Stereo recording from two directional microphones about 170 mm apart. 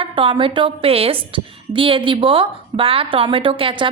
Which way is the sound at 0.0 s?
30° right (ahead or behind).